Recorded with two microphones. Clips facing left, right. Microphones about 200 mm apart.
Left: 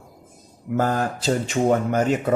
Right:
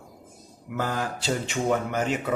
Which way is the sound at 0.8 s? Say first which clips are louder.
Left 6 dB; 45° left (ahead or behind).